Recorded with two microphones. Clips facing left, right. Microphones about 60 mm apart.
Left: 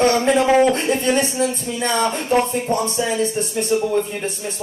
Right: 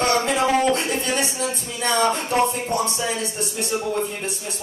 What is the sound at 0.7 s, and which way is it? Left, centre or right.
Music, left.